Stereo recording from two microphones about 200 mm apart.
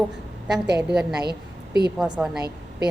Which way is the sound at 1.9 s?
5° right (ahead or behind).